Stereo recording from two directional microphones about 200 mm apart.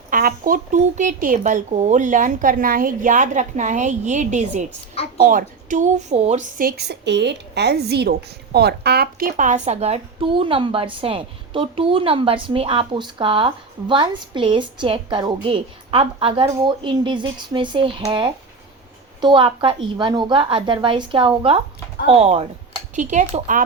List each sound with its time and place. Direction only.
0.1 s speech: 45° right (ahead or behind)
6.7 s a woman's voice: 55° right (ahead or behind); by 23.6 s 40° right (ahead or behind)